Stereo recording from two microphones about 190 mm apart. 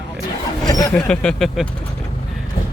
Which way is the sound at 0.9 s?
5° left (ahead or behind).